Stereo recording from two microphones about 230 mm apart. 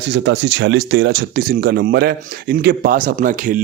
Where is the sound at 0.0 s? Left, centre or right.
Right.